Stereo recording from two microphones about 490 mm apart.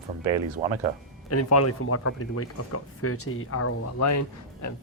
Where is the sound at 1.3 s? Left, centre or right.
Left.